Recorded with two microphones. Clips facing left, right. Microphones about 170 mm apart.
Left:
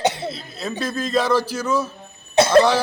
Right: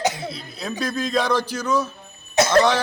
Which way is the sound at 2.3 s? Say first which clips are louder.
Left 3 dB; 30° left (ahead or behind).